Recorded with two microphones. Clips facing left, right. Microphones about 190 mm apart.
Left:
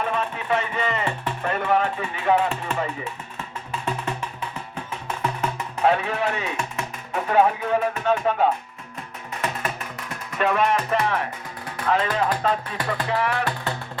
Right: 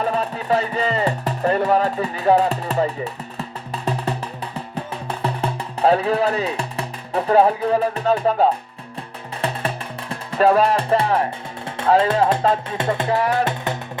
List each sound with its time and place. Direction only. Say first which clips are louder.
0.0 s music: right 4 dB; 35° right (ahead or behind)